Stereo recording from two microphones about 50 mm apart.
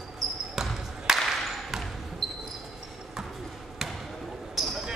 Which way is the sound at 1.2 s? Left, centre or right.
Centre.